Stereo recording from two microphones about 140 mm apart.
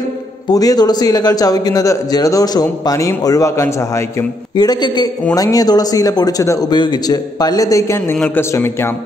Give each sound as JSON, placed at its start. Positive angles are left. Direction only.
{"t": 0.5, "sound": "speech", "side_deg": 30}